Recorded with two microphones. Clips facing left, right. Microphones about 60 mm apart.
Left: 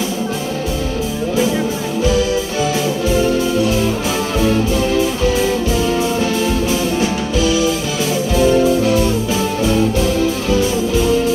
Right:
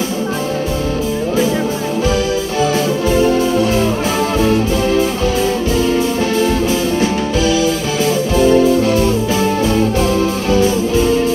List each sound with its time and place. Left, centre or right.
3.1 s music: right
7.0 s music: right